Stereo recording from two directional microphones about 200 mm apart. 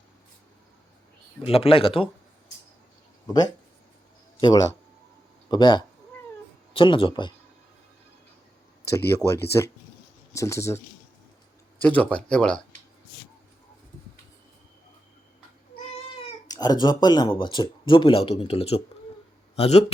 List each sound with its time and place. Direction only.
1.4 s speech: 30° left (ahead or behind)
4.4 s speech: 20° left (ahead or behind)
9.0 s speech: 15° left (ahead or behind)
11.8 s speech: 10° left (ahead or behind)
16.5 s speech: 20° left (ahead or behind)